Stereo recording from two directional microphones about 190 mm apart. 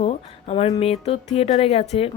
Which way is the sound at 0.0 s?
30° left (ahead or behind).